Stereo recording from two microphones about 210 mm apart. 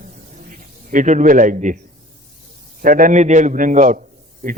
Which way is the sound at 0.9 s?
35° right (ahead or behind).